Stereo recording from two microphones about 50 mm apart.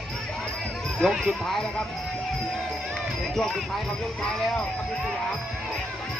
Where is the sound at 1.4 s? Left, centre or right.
Centre.